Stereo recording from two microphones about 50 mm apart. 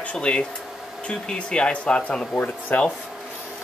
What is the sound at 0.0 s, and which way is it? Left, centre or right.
Speech, left.